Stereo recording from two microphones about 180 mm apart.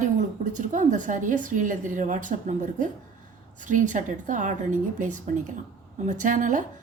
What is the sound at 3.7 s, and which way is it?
Speech, 45° right (ahead or behind).